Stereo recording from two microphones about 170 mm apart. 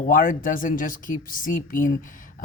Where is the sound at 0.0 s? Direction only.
50° left (ahead or behind).